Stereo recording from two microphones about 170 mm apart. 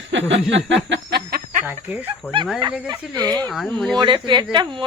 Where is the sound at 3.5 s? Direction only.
5° left (ahead or behind).